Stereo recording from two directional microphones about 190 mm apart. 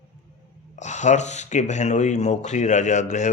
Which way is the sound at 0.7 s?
40° left (ahead or behind).